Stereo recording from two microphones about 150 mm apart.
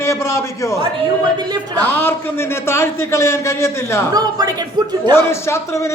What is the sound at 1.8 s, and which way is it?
A man's voice, 15° left (ahead or behind).